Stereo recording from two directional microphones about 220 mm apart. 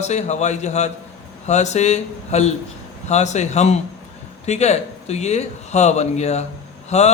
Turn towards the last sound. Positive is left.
turn(degrees=30)  # may be behind; listen again after turning